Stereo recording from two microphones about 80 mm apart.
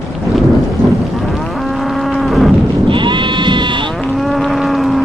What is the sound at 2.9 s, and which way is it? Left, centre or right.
Sheep, right.